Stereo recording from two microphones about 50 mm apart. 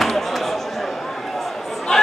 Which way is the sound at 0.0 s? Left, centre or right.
Centre.